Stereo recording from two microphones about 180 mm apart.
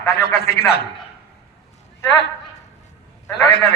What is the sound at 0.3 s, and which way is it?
Speech, 60° left (ahead or behind).